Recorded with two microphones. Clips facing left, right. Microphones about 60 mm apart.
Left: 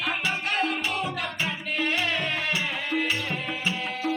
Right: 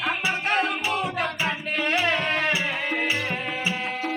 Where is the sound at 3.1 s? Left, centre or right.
Right.